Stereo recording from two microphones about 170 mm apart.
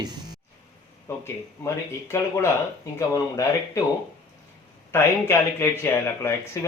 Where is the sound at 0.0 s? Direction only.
25° right (ahead or behind).